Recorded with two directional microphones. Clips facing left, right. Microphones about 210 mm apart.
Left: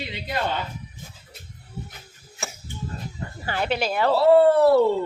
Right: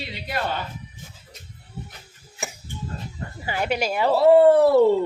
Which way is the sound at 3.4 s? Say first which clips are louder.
Even; 10° right (ahead or behind).